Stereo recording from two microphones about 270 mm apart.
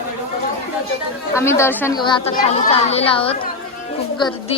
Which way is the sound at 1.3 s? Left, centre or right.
Centre.